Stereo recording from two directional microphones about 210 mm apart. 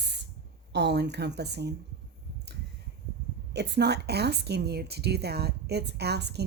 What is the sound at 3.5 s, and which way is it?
A woman's voice, 55° right (ahead or behind).